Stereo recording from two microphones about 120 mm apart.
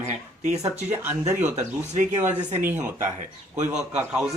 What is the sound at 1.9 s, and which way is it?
Speech, 80° right.